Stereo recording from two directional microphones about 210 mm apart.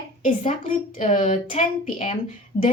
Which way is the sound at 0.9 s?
35° left (ahead or behind).